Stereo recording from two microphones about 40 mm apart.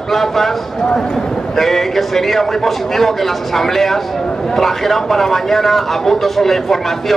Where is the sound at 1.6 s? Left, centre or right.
Centre.